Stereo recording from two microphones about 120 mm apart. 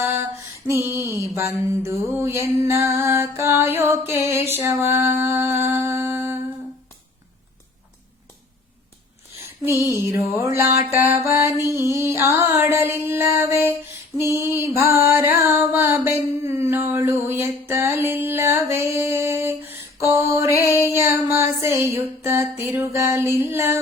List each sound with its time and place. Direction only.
0.0 s female singing: 20° right (ahead or behind)
0.7 s music: 20° right (ahead or behind)
10.0 s music: 20° right (ahead or behind)